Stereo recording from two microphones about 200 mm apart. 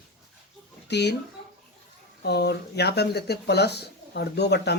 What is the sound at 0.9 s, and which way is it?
Speech, 55° left (ahead or behind).